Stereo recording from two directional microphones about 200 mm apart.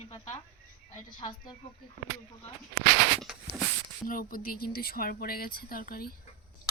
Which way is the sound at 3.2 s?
Centre (ahead or behind).